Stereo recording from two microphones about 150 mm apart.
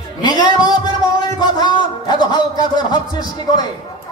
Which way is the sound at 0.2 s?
30° left (ahead or behind).